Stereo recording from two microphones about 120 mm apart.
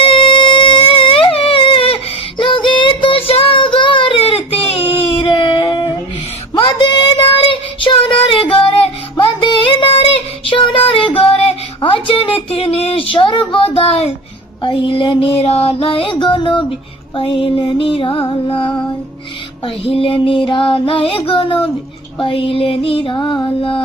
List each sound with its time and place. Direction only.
0.0 s music: 45° left (ahead or behind)
2.4 s child singing: 45° left (ahead or behind)
3.8 s baby cry: 45° left (ahead or behind)
6.7 s child singing: 35° left (ahead or behind)
13.7 s speech: 55° left (ahead or behind)
14.6 s music: 40° left (ahead or behind)
23.1 s music: 40° left (ahead or behind)